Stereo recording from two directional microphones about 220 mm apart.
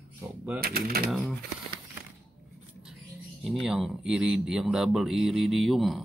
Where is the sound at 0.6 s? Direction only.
45° right (ahead or behind).